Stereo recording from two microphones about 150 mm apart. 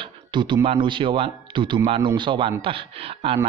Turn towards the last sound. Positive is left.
turn(degrees=-40)  # may be behind; listen again after turning